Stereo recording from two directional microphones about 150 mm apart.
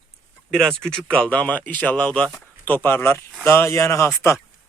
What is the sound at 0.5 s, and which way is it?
A man's voice, 5° left (ahead or behind).